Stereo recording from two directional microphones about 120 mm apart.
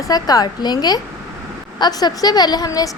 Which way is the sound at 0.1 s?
30° left (ahead or behind).